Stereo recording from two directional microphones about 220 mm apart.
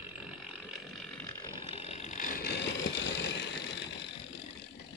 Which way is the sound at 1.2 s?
20° left (ahead or behind).